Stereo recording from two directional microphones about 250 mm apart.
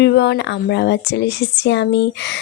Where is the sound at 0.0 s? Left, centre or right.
Left.